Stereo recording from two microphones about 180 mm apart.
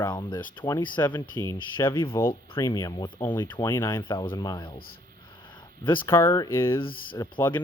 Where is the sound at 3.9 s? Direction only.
25° left (ahead or behind).